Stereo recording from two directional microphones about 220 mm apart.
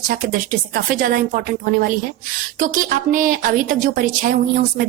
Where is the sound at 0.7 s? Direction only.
40° right (ahead or behind).